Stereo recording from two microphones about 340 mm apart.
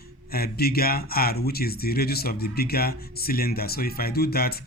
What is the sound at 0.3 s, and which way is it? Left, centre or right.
Speech, left.